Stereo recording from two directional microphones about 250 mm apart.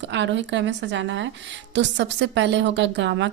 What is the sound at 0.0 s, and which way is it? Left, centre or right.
A woman's voice, right.